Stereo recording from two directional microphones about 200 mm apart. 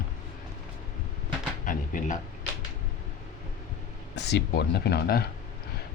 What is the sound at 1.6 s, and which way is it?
Drawer open or close, 40° left (ahead or behind).